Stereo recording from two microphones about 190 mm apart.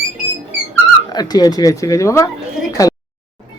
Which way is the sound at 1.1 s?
20° left (ahead or behind).